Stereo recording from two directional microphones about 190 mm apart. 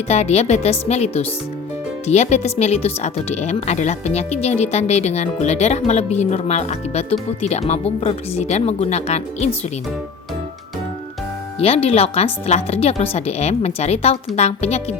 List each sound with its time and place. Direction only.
0.1 s speech: 35° left (ahead or behind)
11.6 s speech: 30° left (ahead or behind)